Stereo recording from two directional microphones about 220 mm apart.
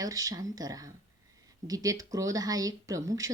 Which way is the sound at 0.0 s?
15° right (ahead or behind).